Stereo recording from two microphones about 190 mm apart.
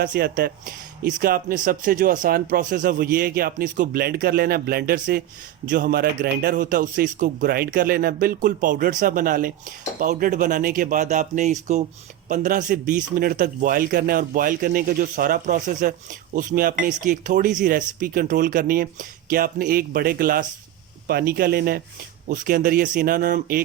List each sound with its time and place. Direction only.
0.0 s a man's voice: 50° right (ahead or behind)